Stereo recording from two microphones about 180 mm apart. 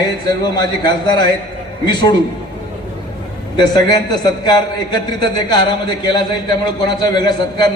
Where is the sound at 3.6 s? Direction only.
25° left (ahead or behind).